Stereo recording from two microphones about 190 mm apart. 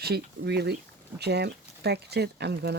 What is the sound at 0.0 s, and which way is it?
Speech, 60° right (ahead or behind).